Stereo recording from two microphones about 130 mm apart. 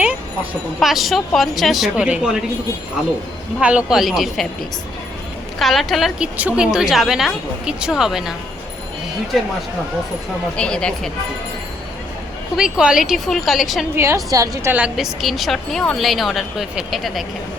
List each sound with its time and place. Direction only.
0.8 s speech: centre (ahead or behind)
3.6 s speech: 10° right (ahead or behind)
5.5 s speech: centre (ahead or behind)
10.6 s speech: 5° left (ahead or behind)
12.5 s speech: 5° right (ahead or behind)
13.9 s a woman's voice: 20° right (ahead or behind)
14.9 s speech: centre (ahead or behind)